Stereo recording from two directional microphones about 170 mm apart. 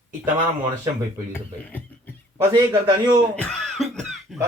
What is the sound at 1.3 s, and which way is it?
Speech, 10° left (ahead or behind).